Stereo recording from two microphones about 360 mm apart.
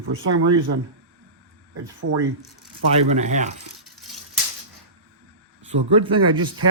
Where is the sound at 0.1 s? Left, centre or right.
Right.